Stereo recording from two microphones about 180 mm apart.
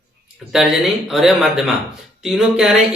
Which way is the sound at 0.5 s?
Centre (ahead or behind).